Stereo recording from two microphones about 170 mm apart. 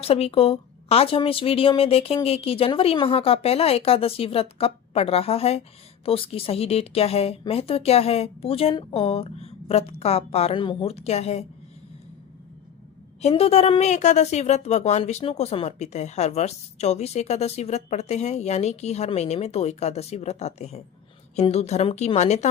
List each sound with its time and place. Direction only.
0.0 s a woman's voice: 35° left (ahead or behind)
13.2 s a woman's voice: 35° left (ahead or behind)